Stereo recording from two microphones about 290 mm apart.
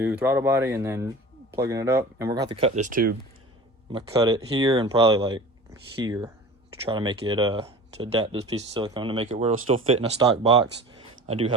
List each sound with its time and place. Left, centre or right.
0.0 s speech: centre; by 3.2 s right
3.9 s speech: centre